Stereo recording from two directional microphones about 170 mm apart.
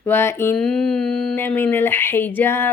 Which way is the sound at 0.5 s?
5° left (ahead or behind).